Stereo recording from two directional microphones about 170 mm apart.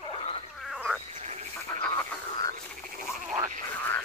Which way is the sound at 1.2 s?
40° right (ahead or behind).